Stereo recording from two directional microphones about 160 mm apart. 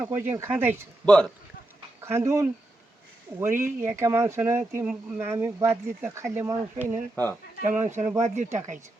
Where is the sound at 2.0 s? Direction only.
15° right (ahead or behind).